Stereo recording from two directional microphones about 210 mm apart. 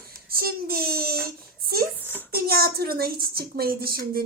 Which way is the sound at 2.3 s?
45° right (ahead or behind).